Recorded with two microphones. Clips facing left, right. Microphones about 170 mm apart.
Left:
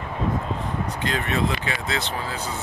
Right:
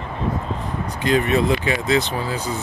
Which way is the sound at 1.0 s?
15° right (ahead or behind).